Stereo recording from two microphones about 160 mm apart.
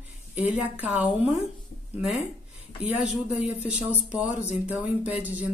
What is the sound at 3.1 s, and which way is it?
Speech, 45° left (ahead or behind).